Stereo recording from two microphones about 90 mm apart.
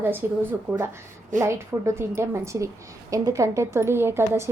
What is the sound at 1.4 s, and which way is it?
A woman's voice, 30° right (ahead or behind).